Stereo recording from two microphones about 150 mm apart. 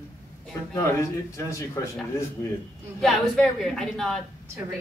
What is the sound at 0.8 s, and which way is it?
A man's voice, 20° left (ahead or behind).